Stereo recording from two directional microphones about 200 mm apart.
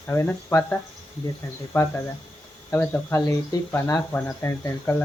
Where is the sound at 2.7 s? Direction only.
10° left (ahead or behind).